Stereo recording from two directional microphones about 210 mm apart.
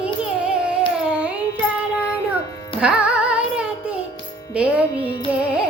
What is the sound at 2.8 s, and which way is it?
Music, 5° right (ahead or behind).